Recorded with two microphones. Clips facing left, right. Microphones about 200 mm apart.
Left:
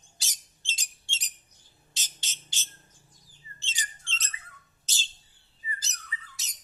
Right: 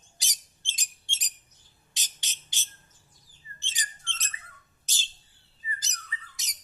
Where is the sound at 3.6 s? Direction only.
15° right (ahead or behind).